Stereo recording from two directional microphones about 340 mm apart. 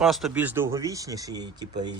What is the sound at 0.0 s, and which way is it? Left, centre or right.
Speech, centre.